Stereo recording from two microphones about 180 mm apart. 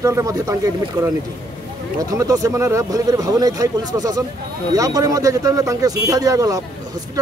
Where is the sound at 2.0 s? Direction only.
20° right (ahead or behind).